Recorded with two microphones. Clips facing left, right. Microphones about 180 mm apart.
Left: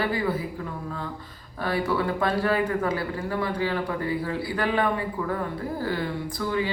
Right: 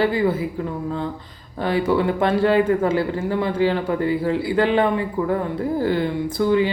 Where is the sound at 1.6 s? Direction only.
20° right (ahead or behind).